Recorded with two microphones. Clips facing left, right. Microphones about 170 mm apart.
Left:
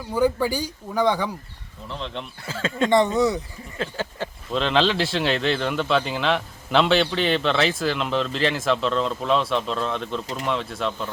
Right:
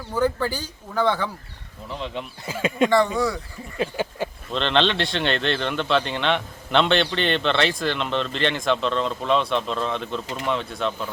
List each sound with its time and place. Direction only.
0.1 s speech: 10° left (ahead or behind)
1.9 s speech: 5° right (ahead or behind)
2.9 s speech: 20° left (ahead or behind)
3.8 s a sound: 15° right (ahead or behind)
4.5 s a man's voice: 5° left (ahead or behind)